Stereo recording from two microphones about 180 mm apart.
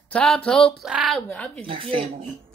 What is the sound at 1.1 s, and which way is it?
Speech, 5° left (ahead or behind).